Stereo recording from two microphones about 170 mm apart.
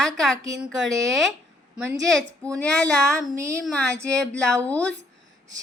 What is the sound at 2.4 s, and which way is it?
Speech, 5° left (ahead or behind).